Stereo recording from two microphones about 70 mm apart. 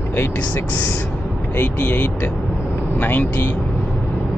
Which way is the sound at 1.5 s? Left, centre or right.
Left.